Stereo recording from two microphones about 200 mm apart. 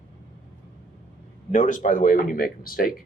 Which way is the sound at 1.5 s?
40° left (ahead or behind).